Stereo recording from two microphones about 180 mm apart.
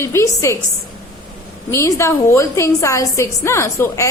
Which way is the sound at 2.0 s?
15° left (ahead or behind).